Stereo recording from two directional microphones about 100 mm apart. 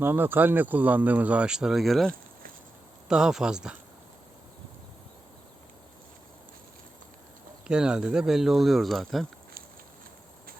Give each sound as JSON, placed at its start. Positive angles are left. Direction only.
{"t": 0.0, "sound": "speech", "side_deg": -20}
{"t": 7.7, "sound": "speech", "side_deg": -10}